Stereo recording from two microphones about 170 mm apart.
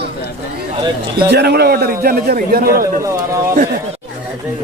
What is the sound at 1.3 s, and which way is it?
A man's voice, 75° right (ahead or behind).